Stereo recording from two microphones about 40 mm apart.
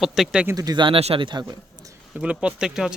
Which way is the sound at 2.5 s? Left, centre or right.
Centre.